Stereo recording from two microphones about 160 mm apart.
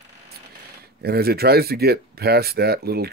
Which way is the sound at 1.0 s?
75° right (ahead or behind).